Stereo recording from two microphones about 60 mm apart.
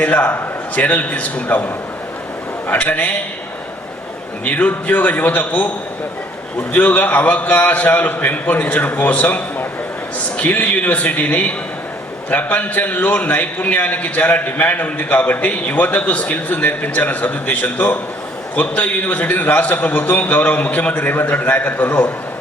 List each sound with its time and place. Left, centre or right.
0.0 s a man's voice: left
4.4 s a man's voice: left